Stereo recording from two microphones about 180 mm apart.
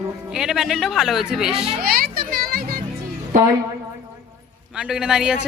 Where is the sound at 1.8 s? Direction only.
55° right (ahead or behind).